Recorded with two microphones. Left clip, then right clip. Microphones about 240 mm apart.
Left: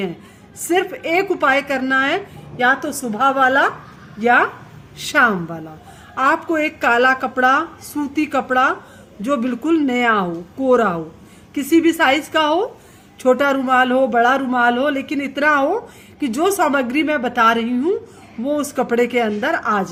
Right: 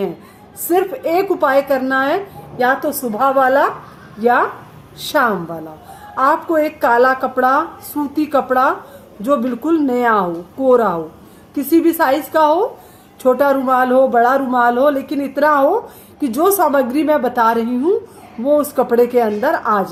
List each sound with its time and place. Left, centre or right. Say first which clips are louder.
0.7 s speech: right 2 dB; left